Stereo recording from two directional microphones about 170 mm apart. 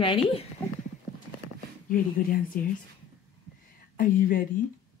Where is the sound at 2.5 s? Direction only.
55° left (ahead or behind).